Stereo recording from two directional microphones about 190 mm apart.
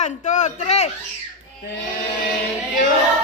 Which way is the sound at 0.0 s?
40° left (ahead or behind).